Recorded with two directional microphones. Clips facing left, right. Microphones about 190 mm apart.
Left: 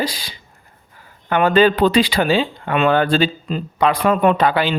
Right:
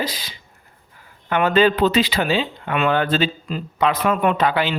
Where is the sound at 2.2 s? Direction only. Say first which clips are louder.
Left 4 dB; 50° left (ahead or behind).